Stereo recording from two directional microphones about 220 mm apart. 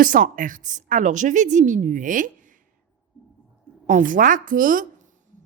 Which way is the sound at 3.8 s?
35° right (ahead or behind).